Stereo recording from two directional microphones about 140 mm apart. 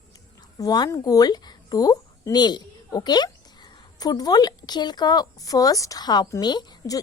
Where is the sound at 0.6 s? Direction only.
25° left (ahead or behind).